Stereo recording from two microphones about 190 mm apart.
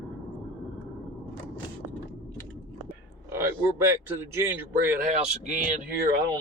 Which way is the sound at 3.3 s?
15° right (ahead or behind).